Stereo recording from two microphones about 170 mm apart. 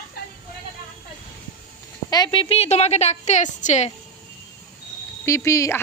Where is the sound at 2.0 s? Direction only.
25° left (ahead or behind); by 3.9 s 45° left (ahead or behind).